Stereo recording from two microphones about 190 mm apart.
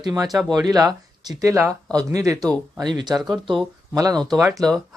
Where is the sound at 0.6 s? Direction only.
20° right (ahead or behind).